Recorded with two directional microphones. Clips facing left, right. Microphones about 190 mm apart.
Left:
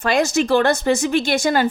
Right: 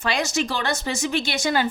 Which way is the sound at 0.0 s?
50° left (ahead or behind).